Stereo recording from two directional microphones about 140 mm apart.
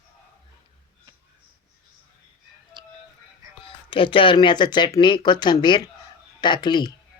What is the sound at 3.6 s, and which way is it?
Speech, 40° left (ahead or behind).